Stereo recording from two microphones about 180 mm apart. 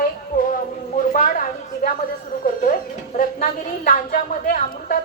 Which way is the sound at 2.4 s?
50° left (ahead or behind).